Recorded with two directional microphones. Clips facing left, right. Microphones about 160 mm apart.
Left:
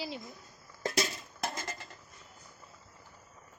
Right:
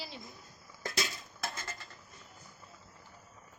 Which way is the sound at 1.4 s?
40° left (ahead or behind).